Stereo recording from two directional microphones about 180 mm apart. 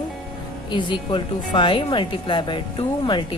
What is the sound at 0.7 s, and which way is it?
Speech, 25° left (ahead or behind).